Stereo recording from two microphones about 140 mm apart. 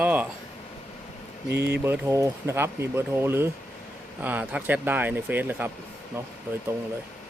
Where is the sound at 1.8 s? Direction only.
15° right (ahead or behind).